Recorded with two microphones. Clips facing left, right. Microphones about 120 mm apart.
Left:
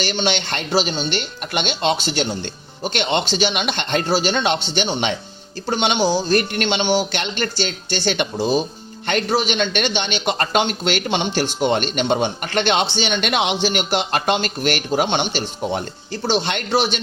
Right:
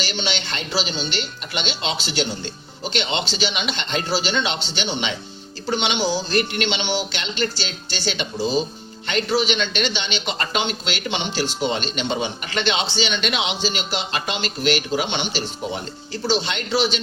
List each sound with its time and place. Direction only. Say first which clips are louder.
0.0 s a man's voice: left 5 dB; 50° left (ahead or behind)